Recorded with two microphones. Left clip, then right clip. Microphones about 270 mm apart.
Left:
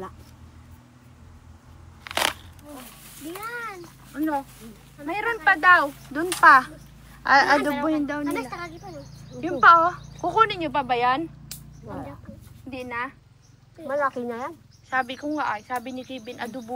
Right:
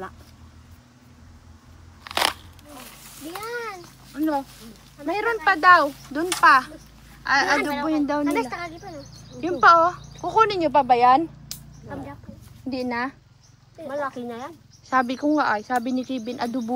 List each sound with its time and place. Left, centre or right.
2.0 s crunch: centre
3.4 s cat: right
4.1 s a sound: centre
5.0 s a woman's voice: centre
8.3 s speech: right
9.4 s speech: centre
12.6 s speech: centre
13.8 s speech: centre
14.9 s speech: centre